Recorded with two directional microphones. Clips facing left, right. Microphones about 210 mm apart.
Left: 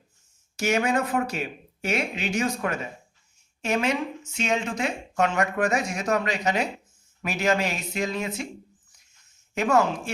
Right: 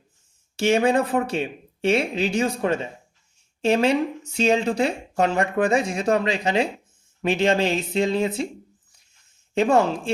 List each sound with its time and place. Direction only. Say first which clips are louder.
0.5 s speech: right 5 dB; 30° right (ahead or behind)
9.6 s speech: right 3 dB; 30° right (ahead or behind)